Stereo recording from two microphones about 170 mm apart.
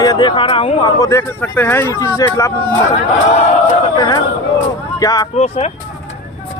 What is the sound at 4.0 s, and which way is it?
Speech, 25° left (ahead or behind).